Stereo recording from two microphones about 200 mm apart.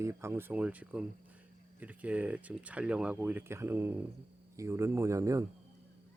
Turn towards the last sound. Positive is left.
turn(degrees=-15)  # may be behind; listen again after turning